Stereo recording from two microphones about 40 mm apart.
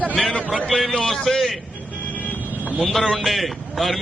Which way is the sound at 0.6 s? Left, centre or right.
Centre.